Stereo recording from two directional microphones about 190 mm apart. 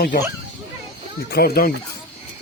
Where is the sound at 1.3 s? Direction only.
55° left (ahead or behind).